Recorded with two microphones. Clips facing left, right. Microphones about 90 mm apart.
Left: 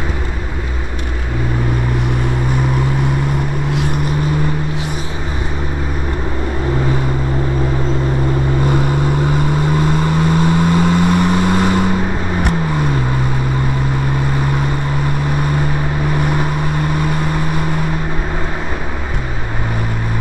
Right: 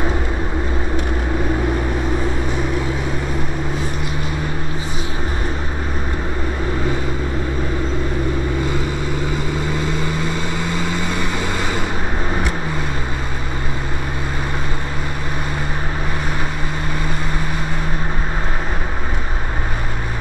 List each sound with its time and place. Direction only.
9.2 s vehicle: 50° left (ahead or behind)